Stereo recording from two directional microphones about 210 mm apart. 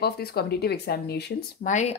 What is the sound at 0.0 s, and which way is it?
Speech, 50° left (ahead or behind).